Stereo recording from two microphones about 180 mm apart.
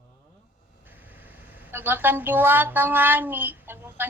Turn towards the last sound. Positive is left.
turn(degrees=-10)  # may be behind; listen again after turning